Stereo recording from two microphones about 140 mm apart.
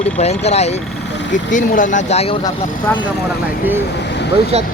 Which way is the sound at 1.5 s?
65° left (ahead or behind).